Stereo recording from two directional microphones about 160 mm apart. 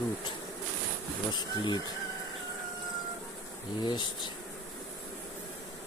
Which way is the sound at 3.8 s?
30° left (ahead or behind).